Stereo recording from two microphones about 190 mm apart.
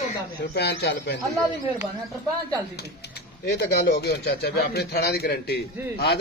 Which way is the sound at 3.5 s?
60° left (ahead or behind).